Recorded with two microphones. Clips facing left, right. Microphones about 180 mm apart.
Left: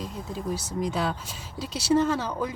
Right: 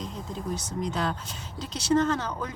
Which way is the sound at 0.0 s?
5° left (ahead or behind).